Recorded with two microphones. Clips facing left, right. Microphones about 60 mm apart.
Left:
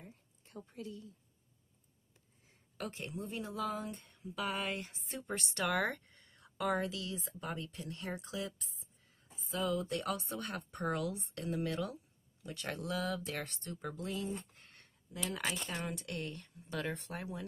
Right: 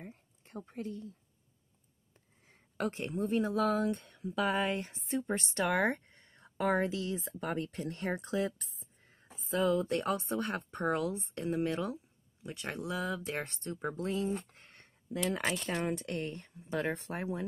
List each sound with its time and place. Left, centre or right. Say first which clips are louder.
0.0 s a sound: right 6 dB; right
2.8 s speech: right 8 dB; right
3.8 s speech: right 11 dB; right
4.4 s speech: right 6 dB; right